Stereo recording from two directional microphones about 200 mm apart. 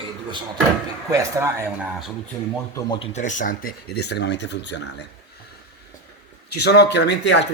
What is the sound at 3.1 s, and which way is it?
Speech, 40° left (ahead or behind).